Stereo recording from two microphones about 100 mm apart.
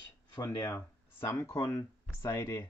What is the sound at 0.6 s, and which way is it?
Speech, 25° left (ahead or behind).